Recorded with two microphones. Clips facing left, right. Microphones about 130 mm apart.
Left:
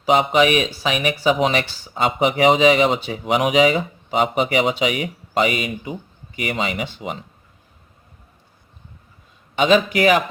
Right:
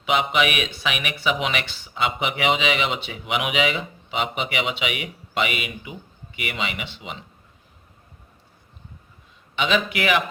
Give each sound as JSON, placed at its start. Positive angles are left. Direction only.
{"t": 0.0, "sound": "speech", "side_deg": 35}
{"t": 9.6, "sound": "speech", "side_deg": 40}